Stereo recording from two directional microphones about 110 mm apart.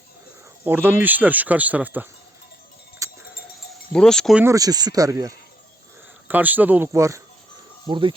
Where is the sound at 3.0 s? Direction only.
30° right (ahead or behind).